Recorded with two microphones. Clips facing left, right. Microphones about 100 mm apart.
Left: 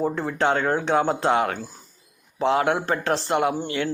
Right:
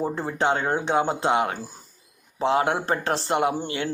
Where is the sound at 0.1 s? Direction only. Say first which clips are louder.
Left 1 dB; 30° right (ahead or behind).